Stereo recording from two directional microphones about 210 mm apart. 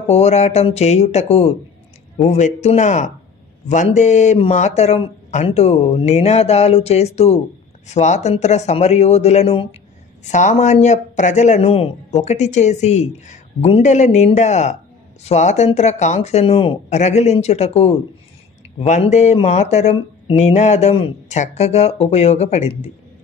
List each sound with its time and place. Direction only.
0.0 s speech: 30° left (ahead or behind)